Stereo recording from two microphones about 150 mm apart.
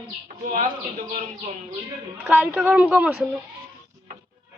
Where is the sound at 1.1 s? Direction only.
50° right (ahead or behind).